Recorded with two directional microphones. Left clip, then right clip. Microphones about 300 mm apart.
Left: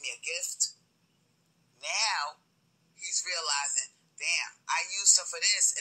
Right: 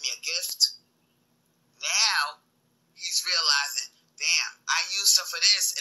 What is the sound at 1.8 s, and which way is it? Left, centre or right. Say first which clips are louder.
Speech: right 6 dB; centre.